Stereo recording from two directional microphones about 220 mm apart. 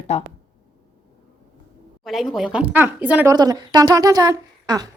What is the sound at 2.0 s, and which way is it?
Speech, centre (ahead or behind).